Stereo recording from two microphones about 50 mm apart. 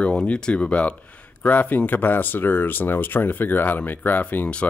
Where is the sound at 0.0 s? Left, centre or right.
Left.